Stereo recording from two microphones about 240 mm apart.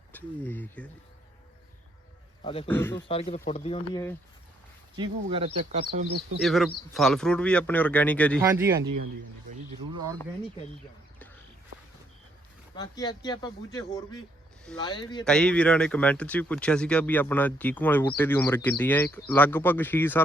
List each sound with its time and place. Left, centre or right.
0.1 s speech: centre
2.4 s a man's voice: left
2.6 s speech: centre
3.1 s speech: left
4.9 s speech: right
6.1 s speech: right
6.4 s speech: centre
8.4 s speech: centre
12.7 s speech: centre
15.2 s speech: centre